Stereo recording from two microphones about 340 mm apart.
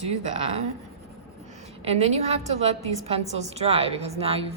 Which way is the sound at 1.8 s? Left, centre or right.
Centre.